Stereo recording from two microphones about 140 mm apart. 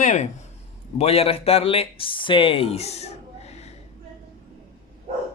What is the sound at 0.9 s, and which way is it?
Speech, 45° left (ahead or behind).